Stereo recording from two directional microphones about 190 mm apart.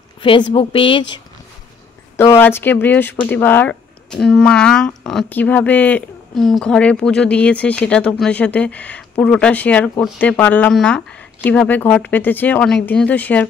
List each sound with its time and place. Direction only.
0.2 s speech: 25° left (ahead or behind)
2.3 s speech: 10° left (ahead or behind)